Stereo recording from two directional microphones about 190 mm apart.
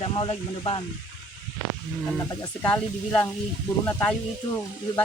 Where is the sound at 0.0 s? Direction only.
30° left (ahead or behind).